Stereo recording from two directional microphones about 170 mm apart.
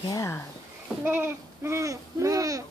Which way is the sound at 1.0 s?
15° right (ahead or behind).